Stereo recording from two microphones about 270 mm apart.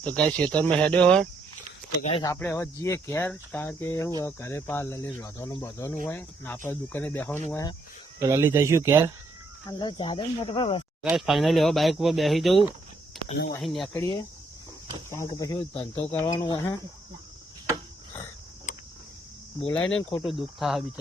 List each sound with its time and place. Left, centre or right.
0.0 s speech: centre
2.0 s speech: centre
8.2 s speech: centre
9.6 s speech: centre
11.1 s speech: centre
19.6 s speech: centre